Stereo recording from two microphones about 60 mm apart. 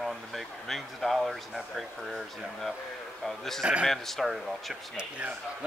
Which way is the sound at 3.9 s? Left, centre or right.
Centre.